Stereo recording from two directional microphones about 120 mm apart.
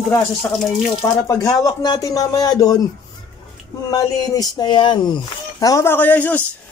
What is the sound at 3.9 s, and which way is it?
Speech, 30° left (ahead or behind).